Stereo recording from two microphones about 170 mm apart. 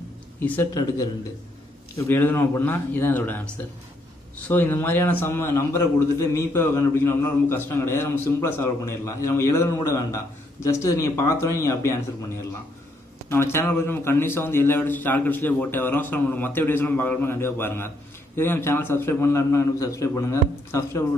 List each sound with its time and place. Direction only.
0.4 s a man's voice: 15° left (ahead or behind)
4.5 s a man's voice: 10° left (ahead or behind)
13.3 s a man's voice: 15° left (ahead or behind)